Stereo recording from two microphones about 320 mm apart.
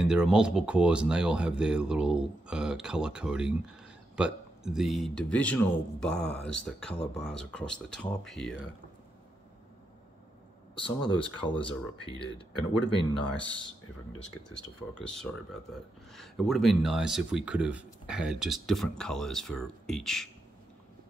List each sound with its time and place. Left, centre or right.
0.0 s speech: centre
10.7 s speech: centre
13.4 s speech: centre
15.3 s speech: centre